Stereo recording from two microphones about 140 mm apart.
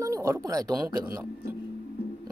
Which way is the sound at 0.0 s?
20° right (ahead or behind).